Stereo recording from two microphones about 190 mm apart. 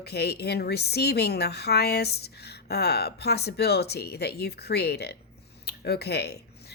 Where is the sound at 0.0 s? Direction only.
60° left (ahead or behind).